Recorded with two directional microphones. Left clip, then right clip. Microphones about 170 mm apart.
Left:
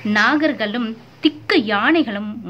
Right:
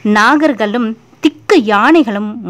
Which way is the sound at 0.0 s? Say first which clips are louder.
Right 7 dB; 45° right (ahead or behind).